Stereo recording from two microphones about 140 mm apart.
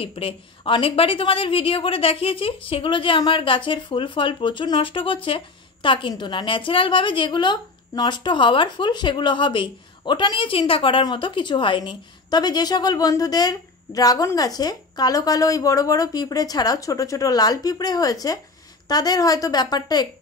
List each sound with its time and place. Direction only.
0.0 s a woman's voice: 45° left (ahead or behind)